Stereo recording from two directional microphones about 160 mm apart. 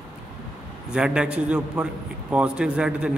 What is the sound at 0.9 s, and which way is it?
A man's voice, 5° right (ahead or behind).